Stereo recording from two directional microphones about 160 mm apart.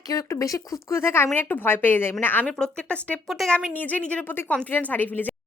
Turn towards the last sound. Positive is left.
turn(degrees=10)  # may be behind; listen again after turning